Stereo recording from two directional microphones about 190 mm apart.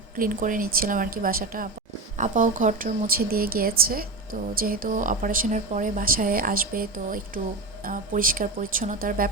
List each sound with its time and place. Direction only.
0.2 s a woman's voice: 45° right (ahead or behind)